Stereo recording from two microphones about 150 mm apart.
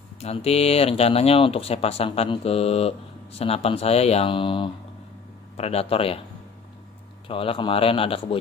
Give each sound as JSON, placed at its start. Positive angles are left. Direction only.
{"t": 0.2, "sound": "speech", "side_deg": 45}
{"t": 7.2, "sound": "speech", "side_deg": 40}